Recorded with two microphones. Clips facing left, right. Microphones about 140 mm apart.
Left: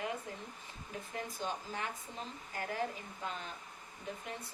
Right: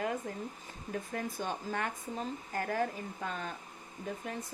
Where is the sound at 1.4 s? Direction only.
55° right (ahead or behind).